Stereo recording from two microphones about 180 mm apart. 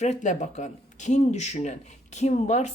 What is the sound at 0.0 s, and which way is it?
Speech, 40° left (ahead or behind).